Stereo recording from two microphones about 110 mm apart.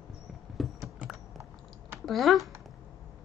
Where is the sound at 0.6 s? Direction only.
5° right (ahead or behind).